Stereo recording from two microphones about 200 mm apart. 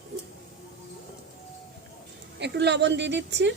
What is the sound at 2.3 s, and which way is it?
Speech, 60° right (ahead or behind).